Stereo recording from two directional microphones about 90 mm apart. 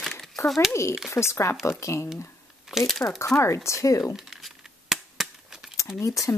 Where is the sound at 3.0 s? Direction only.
35° left (ahead or behind).